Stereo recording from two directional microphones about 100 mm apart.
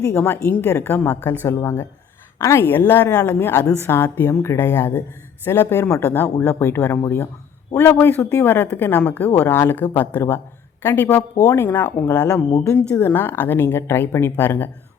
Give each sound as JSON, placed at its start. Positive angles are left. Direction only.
{"t": 0.0, "sound": "speech", "side_deg": 20}